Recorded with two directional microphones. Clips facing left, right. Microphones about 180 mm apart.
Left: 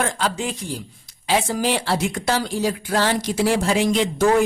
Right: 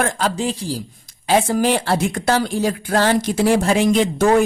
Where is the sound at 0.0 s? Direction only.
45° right (ahead or behind).